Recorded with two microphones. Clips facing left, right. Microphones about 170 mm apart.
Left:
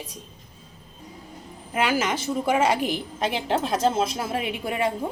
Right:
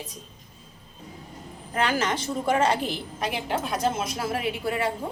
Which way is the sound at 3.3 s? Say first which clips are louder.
Left 4 dB; 30° left (ahead or behind).